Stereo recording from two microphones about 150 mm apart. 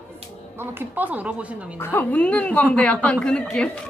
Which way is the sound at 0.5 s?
15° right (ahead or behind).